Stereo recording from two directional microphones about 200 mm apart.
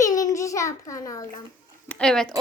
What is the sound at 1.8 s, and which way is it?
Speech, 5° left (ahead or behind).